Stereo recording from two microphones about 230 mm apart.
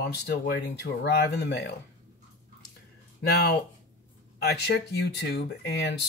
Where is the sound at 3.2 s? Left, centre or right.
Left.